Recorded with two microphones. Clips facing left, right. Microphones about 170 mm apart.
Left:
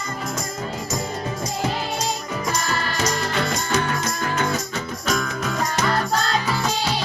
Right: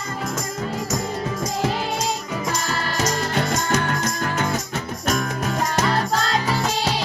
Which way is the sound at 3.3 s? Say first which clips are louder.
Right 1 dB; 50° right (ahead or behind).